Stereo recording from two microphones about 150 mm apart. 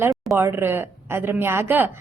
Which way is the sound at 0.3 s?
15° right (ahead or behind).